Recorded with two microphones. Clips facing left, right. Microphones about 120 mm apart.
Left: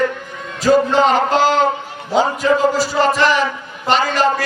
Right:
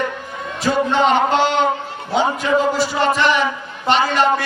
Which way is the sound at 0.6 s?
35° left (ahead or behind).